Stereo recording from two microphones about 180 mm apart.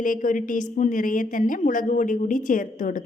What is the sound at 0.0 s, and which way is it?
A woman's voice, 50° left (ahead or behind).